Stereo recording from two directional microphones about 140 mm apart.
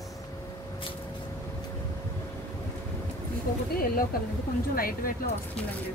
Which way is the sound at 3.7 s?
90° left.